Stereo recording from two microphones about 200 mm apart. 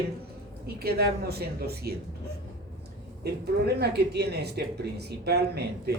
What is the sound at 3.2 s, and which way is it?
Speech, 55° right (ahead or behind).